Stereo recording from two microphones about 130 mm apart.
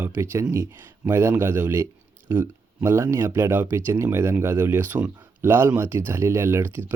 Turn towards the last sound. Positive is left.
turn(degrees=-20)  # may be behind; listen again after turning